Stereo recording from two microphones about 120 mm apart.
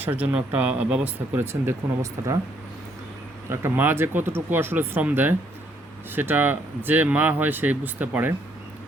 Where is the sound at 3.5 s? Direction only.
20° right (ahead or behind).